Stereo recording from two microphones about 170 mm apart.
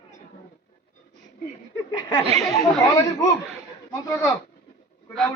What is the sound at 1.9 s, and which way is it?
Speech, 25° left (ahead or behind).